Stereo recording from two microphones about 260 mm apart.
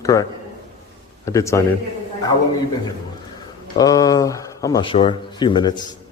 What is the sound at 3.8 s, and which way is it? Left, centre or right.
Speech, centre.